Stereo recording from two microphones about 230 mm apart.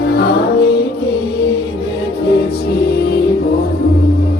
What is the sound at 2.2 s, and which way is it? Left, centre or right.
Music, left.